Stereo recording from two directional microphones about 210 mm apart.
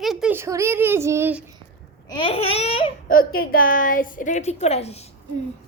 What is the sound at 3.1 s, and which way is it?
A woman's voice, 45° left (ahead or behind).